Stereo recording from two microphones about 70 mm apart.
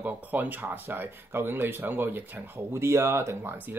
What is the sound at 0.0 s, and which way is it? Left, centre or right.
Speech, right.